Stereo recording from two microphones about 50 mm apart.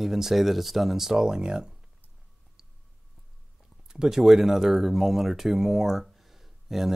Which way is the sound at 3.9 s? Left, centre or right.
Centre.